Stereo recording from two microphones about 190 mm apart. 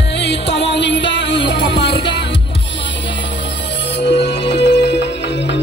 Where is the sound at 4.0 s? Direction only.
65° left (ahead or behind).